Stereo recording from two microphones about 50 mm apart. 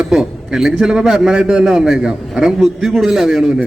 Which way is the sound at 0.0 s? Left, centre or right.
Centre.